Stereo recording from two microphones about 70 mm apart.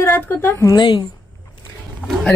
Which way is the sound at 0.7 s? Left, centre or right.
Left.